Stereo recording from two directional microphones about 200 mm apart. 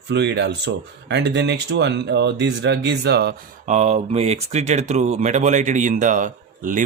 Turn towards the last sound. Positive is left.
turn(degrees=-40)  # may be behind; listen again after turning